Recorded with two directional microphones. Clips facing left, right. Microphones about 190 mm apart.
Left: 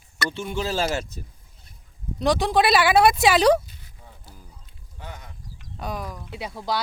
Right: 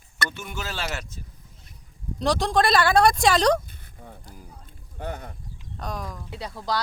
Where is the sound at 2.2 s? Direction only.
Centre (ahead or behind).